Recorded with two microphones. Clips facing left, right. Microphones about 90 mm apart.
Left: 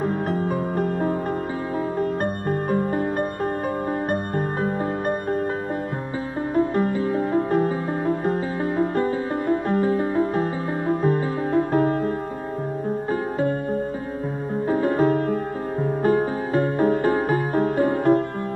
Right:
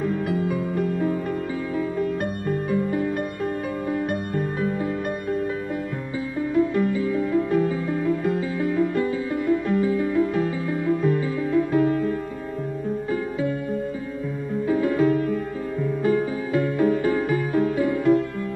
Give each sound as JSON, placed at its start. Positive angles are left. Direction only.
{"t": 0.0, "sound": "music", "side_deg": 40}
{"t": 2.7, "sound": "music", "side_deg": 45}
{"t": 6.5, "sound": "music", "side_deg": 40}
{"t": 14.7, "sound": "music", "side_deg": 40}